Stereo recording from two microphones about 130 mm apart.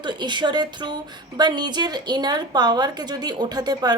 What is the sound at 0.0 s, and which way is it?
A woman's voice, 35° right (ahead or behind).